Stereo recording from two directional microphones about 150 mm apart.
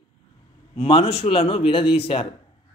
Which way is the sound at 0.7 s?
40° left (ahead or behind).